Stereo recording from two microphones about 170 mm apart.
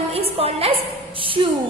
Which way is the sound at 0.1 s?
35° right (ahead or behind).